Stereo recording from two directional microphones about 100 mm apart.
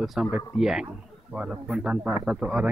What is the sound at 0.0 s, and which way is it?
Speech, 5° right (ahead or behind).